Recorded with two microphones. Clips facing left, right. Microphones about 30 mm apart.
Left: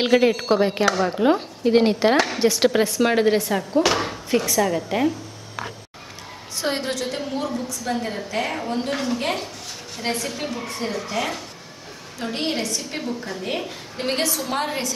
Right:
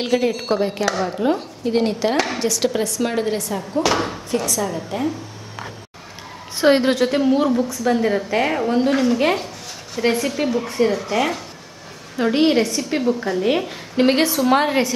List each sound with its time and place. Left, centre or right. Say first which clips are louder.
0.0 s a woman's voice: left 2 dB; centre
3.8 s a woman's voice: right 2 dB; centre
4.5 s a woman's voice: left 2 dB; centre
6.6 s a woman's voice: right 10 dB; right
7.9 s a woman's voice: right 6 dB; centre